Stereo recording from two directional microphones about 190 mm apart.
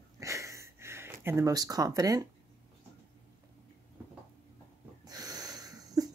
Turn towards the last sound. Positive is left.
turn(degrees=-20)  # may be behind; listen again after turning